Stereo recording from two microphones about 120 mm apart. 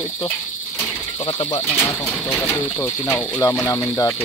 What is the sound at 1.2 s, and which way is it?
Speech, 35° left (ahead or behind).